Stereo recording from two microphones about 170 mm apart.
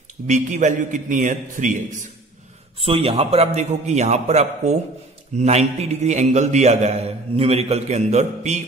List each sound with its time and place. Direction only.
0.3 s a man's voice: 45° right (ahead or behind)
2.8 s a man's voice: 35° right (ahead or behind)